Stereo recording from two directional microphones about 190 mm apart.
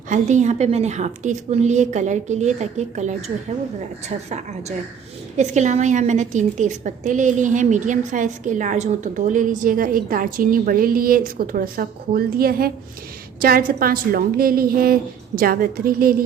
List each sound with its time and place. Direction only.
0.1 s a woman's voice: 40° right (ahead or behind)
5.4 s a woman's voice: 40° right (ahead or behind)